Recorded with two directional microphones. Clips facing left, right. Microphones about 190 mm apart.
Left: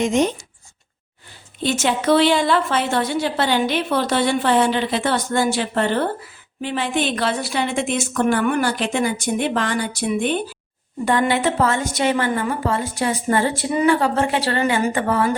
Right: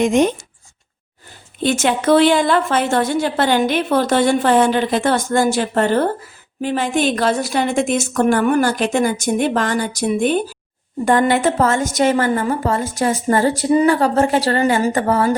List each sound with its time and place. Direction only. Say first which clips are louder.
0.0 s speech: right 4 dB; 55° right (ahead or behind)
1.6 s a woman's voice: right 3 dB; 50° right (ahead or behind)